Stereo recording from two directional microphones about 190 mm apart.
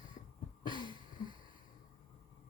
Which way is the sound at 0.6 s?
25° left (ahead or behind).